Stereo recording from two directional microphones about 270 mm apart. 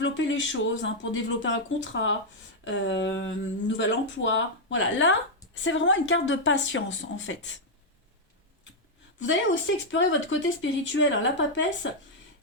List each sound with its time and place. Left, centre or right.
0.0 s speech: left
9.2 s speech: left